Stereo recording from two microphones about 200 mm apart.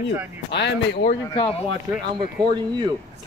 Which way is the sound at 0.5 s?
60° left (ahead or behind).